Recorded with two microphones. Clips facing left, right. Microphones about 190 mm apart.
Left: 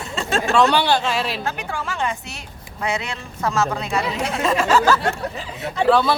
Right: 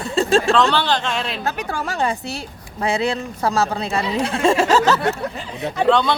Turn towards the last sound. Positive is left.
turn(degrees=5)  # may be behind; listen again after turning